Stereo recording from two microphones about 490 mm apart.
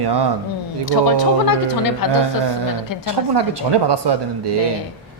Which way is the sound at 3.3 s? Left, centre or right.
Right.